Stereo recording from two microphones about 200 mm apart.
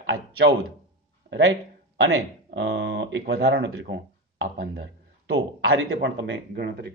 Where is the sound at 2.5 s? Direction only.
60° right (ahead or behind).